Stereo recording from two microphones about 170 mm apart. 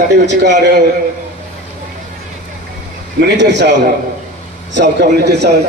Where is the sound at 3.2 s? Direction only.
90° right.